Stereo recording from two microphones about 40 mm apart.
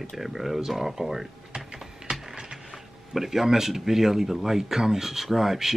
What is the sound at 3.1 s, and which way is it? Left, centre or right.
Speech, centre.